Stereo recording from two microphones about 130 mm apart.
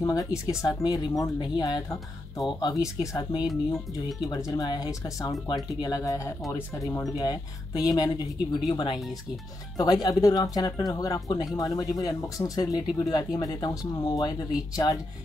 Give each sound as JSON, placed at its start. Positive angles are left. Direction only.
{"t": 0.0, "sound": "speech", "side_deg": 25}
{"t": 3.4, "sound": "speech", "side_deg": 0}
{"t": 4.3, "sound": "speech", "side_deg": 30}
{"t": 10.0, "sound": "speech", "side_deg": 25}